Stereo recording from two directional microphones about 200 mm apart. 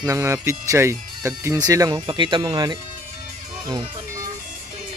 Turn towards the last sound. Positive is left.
turn(degrees=-20)  # may be behind; listen again after turning